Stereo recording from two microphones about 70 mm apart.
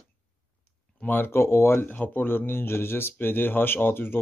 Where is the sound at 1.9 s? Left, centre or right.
Left.